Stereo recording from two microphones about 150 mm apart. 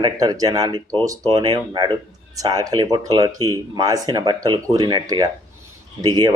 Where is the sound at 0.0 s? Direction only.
25° right (ahead or behind).